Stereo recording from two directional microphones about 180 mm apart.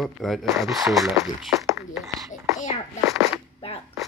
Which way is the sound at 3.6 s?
35° left (ahead or behind).